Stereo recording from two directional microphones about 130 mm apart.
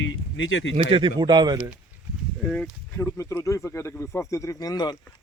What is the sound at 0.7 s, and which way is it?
Speech, 45° right (ahead or behind).